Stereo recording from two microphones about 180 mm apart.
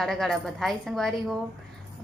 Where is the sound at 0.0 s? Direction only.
Centre (ahead or behind).